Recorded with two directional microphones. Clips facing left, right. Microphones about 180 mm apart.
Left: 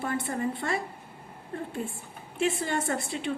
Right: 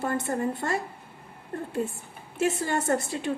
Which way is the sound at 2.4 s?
45° right (ahead or behind).